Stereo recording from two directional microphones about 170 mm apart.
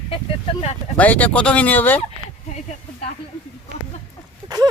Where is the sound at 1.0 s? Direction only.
10° left (ahead or behind).